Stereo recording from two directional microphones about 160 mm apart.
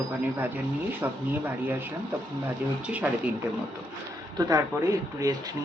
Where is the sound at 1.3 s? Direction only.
10° right (ahead or behind).